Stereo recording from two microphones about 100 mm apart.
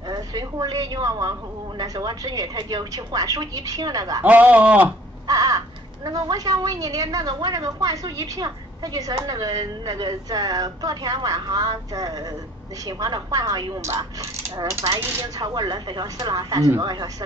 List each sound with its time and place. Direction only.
0.1 s a woman's voice: 40° right (ahead or behind)
4.2 s speech: 15° right (ahead or behind)
5.2 s crow: 40° right (ahead or behind)
6.0 s a woman's voice: 45° right (ahead or behind)
15.3 s a woman's voice: 40° right (ahead or behind)